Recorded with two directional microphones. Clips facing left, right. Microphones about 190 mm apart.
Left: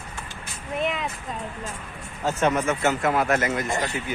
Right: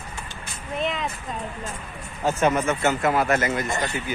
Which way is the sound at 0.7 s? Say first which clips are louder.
Even; 10° left (ahead or behind).